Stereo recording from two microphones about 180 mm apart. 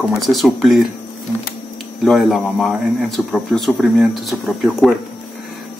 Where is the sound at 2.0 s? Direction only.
Centre (ahead or behind).